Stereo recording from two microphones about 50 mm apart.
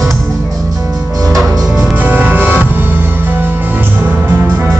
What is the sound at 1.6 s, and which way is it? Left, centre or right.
Music, centre.